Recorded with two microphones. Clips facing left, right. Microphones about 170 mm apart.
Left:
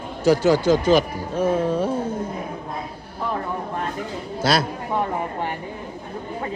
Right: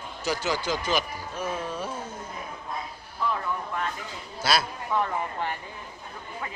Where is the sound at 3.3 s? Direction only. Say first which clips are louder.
Left 7 dB; 35° left (ahead or behind).